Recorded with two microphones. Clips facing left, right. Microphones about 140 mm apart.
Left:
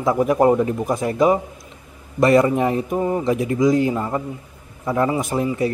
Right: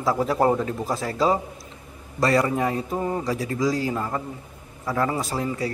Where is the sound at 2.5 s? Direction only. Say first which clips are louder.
Left 5 dB; 20° left (ahead or behind).